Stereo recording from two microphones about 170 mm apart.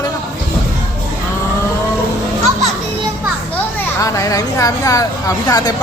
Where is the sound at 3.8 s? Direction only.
20° left (ahead or behind).